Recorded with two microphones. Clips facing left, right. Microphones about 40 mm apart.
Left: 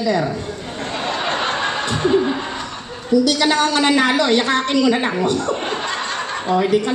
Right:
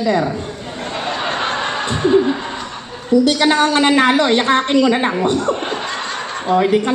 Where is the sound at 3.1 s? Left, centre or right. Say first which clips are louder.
Right 2 dB; right.